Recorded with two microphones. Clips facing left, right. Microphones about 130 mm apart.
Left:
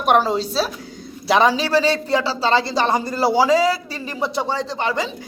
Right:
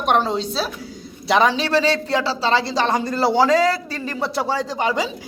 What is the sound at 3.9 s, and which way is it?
Speech, 20° left (ahead or behind).